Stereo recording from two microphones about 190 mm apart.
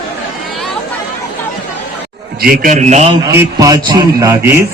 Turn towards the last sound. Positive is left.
turn(degrees=-10)  # may be behind; listen again after turning